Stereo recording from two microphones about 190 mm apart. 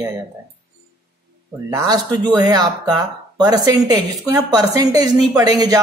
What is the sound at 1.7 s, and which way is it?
Speech, 20° right (ahead or behind).